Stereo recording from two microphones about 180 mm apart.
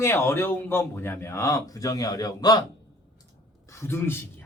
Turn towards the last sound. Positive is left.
turn(degrees=15)  # may be behind; listen again after turning